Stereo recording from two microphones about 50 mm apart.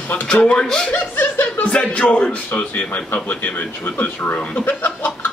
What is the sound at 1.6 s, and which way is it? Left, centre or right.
A man's voice, left.